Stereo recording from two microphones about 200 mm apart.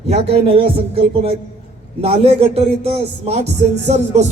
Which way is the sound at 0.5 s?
30° right (ahead or behind).